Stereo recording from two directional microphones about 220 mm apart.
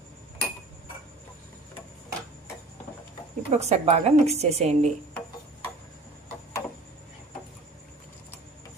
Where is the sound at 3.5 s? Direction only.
30° right (ahead or behind).